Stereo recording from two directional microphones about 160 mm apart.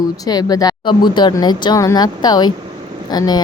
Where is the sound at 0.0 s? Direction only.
25° left (ahead or behind).